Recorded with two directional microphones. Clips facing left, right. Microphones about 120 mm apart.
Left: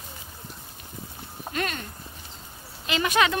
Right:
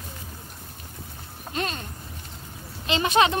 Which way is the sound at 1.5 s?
25° right (ahead or behind).